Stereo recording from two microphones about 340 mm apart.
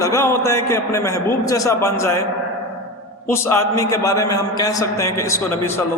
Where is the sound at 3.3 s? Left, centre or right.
Centre.